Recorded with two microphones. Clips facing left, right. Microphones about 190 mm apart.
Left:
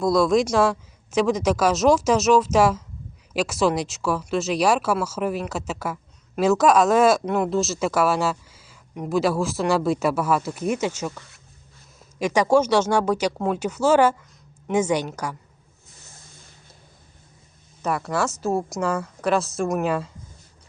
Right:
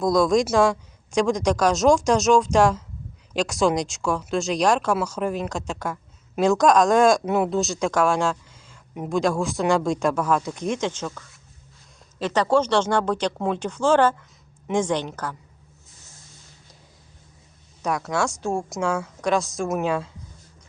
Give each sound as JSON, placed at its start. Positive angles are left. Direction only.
{"t": 0.0, "sound": "a woman's voice", "side_deg": 0}
{"t": 12.2, "sound": "speech", "side_deg": 10}
{"t": 15.9, "sound": "a sound", "side_deg": 60}
{"t": 17.8, "sound": "a woman's voice", "side_deg": 5}